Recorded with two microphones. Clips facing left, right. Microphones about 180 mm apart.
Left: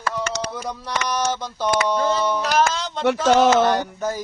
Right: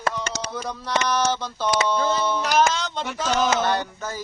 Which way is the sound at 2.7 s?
Centre (ahead or behind).